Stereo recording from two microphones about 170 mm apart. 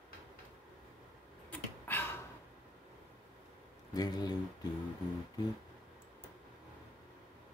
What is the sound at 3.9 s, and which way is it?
Speech, 25° left (ahead or behind).